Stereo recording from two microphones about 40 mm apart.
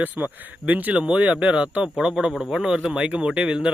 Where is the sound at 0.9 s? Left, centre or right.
Right.